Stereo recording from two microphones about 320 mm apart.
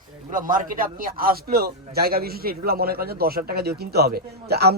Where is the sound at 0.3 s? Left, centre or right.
Right.